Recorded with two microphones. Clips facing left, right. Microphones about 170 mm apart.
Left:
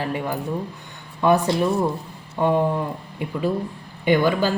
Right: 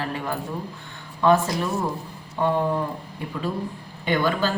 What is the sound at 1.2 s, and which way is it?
Speech, 20° left (ahead or behind).